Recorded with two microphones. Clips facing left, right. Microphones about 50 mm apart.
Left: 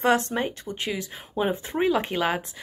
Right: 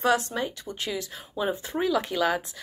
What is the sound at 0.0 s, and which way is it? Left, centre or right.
Speech, left.